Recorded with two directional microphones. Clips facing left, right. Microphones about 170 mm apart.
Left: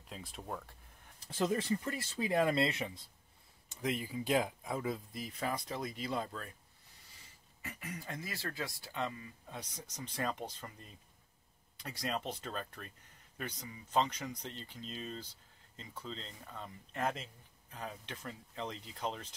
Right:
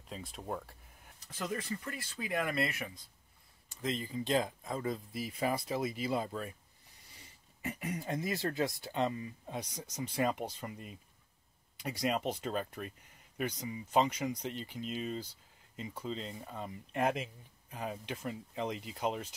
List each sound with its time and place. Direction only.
0.1 s speech: centre (ahead or behind)
1.2 s speech: 30° left (ahead or behind)
3.6 s speech: 15° left (ahead or behind)
5.2 s speech: 10° right (ahead or behind)
7.6 s speech: 20° right (ahead or behind)